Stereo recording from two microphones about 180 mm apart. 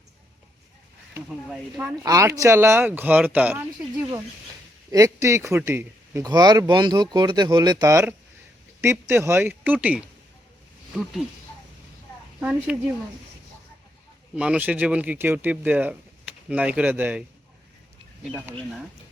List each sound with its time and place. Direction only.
1.5 s speech: 5° right (ahead or behind)
2.0 s speech: 20° right (ahead or behind)
4.9 s speech: 20° right (ahead or behind)
12.4 s speech: 10° right (ahead or behind)
14.3 s speech: 5° right (ahead or behind)